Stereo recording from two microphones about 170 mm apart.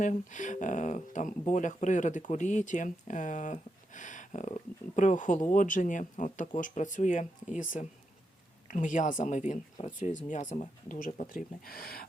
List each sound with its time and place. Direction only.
0.0 s speech: 45° left (ahead or behind)
11.6 s speech: 60° left (ahead or behind)